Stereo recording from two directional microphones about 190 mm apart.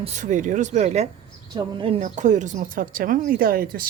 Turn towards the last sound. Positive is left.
turn(degrees=-50)  # may be behind; listen again after turning